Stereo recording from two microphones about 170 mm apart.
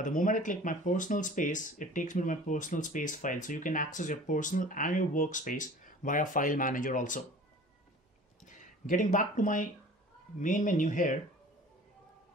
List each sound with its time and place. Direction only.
0.0 s speech: 50° left (ahead or behind)
8.5 s speech: 50° left (ahead or behind)